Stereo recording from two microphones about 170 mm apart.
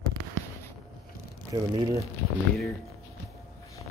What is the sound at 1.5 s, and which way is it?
Speech, 25° right (ahead or behind).